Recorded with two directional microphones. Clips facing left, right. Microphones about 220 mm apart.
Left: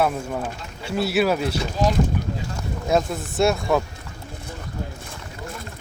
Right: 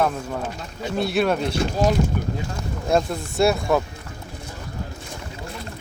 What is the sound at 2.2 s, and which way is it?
Wind noise, 45° right (ahead or behind).